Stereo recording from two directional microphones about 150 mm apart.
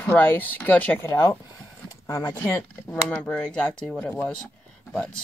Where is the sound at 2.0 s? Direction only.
25° left (ahead or behind).